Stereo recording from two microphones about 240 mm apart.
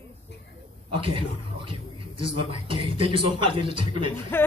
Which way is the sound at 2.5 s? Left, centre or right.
Right.